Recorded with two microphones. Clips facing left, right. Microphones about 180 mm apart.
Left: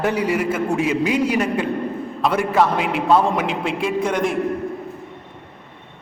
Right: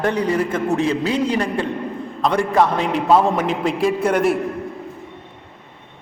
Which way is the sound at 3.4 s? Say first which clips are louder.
Right 3 dB; 40° right (ahead or behind).